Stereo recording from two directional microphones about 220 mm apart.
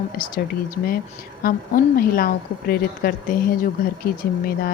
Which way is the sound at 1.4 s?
40° left (ahead or behind).